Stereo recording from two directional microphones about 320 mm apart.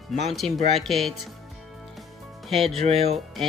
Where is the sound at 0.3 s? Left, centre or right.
Centre.